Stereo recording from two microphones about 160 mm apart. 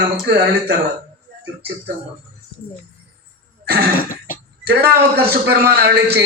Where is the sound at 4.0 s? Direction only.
60° left (ahead or behind).